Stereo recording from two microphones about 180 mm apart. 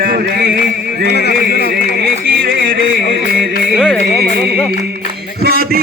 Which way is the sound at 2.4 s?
55° right (ahead or behind).